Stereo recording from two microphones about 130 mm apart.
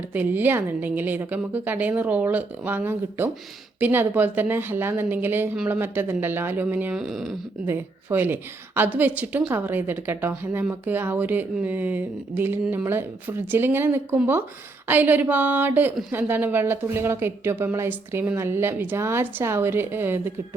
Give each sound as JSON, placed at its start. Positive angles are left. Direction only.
{"t": 0.1, "sound": "a woman's voice", "side_deg": -15}
{"t": 7.7, "sound": "a woman's voice", "side_deg": -15}